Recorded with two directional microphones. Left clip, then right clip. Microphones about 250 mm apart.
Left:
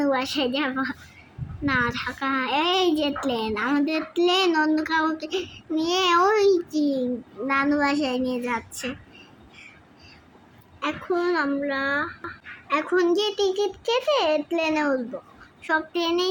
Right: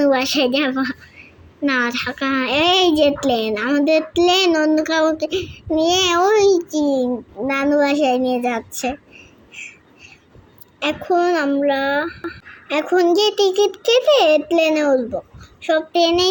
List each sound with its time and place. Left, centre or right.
0.0 s a woman's voice: right
10.8 s a child's voice: centre